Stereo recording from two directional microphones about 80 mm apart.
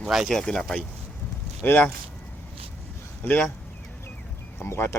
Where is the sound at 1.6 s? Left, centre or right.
Left.